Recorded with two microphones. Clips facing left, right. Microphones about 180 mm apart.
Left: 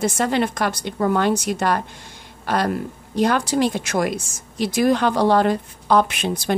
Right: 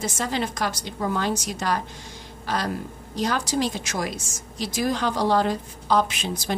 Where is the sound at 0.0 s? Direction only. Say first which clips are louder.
Left 7 dB; 60° left (ahead or behind).